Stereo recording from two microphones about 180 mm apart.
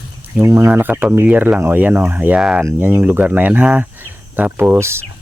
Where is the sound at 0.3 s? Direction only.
15° right (ahead or behind).